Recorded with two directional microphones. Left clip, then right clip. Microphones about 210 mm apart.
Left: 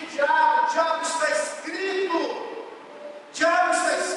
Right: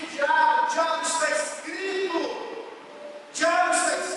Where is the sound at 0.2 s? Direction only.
10° left (ahead or behind).